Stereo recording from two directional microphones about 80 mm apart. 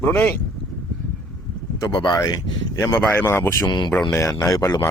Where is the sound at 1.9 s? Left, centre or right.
Left.